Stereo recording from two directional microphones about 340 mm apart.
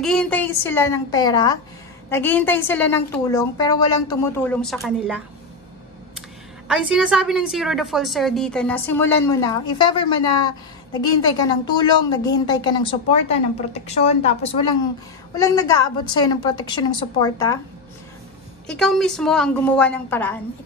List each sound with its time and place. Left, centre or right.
0.0 s a woman's voice: centre
6.7 s a woman's voice: centre
18.7 s a woman's voice: centre